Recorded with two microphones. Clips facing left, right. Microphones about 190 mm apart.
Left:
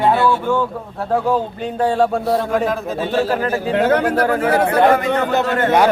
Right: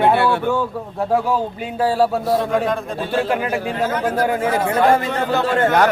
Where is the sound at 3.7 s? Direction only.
65° left (ahead or behind).